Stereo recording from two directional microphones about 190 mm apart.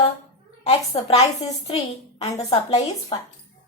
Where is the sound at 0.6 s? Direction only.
30° left (ahead or behind).